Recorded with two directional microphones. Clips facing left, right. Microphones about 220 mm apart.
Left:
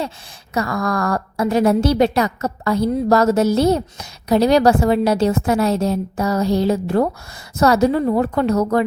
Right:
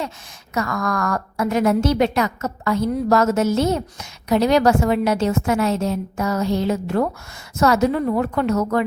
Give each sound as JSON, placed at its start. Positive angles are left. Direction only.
{"t": 0.5, "sound": "a woman's voice", "side_deg": 30}